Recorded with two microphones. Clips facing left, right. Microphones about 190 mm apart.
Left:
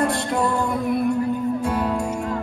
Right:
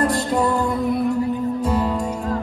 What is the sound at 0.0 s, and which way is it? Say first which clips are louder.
Music: right 2 dB; centre (ahead or behind).